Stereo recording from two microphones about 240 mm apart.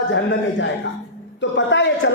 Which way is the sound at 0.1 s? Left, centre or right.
Left.